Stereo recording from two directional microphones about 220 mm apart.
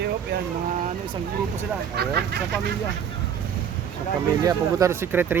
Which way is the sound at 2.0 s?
45° right (ahead or behind).